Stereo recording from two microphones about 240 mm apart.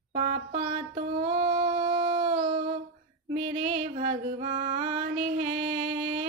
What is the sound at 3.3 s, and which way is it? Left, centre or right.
Female singing, right.